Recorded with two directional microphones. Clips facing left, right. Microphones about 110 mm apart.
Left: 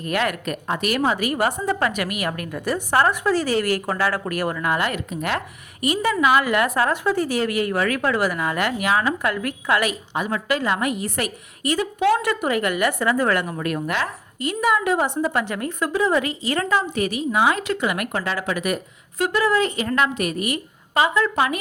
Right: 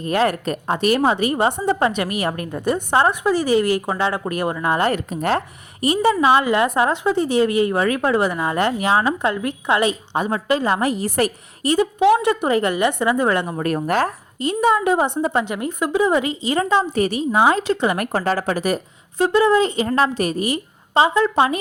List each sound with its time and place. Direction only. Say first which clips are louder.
0.0 s speech: right 4 dB; 30° right (ahead or behind)
13.6 s speech: right 5 dB; 35° right (ahead or behind)
14.4 s speech: right 3 dB; 25° right (ahead or behind)